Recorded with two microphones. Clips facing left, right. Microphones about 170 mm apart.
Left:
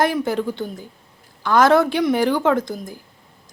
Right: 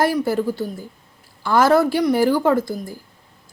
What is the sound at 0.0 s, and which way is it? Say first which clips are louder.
A woman's voice: right 1 dB; 5° right (ahead or behind).